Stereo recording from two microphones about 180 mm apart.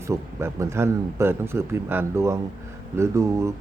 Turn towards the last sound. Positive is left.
turn(degrees=-15)  # may be behind; listen again after turning